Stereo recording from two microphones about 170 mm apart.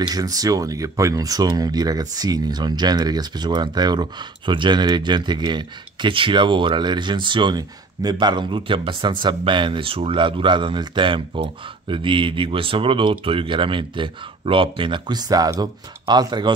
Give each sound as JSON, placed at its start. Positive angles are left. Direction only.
{"t": 0.0, "sound": "speech", "side_deg": -20}